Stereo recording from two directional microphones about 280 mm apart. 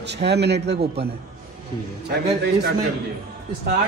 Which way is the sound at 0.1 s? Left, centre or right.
Right.